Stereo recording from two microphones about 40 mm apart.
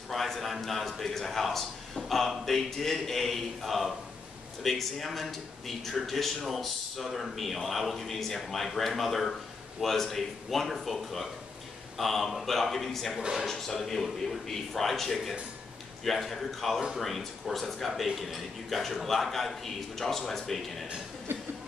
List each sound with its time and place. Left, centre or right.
0.1 s a man's voice: centre
13.2 s speech: centre
13.5 s a man's voice: centre